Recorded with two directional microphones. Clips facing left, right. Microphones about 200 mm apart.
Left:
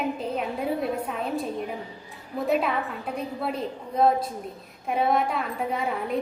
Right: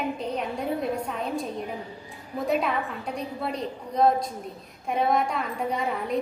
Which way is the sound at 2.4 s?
Centre (ahead or behind).